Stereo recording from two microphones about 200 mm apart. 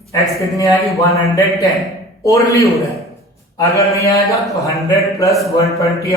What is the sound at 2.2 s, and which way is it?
Speech, 15° left (ahead or behind).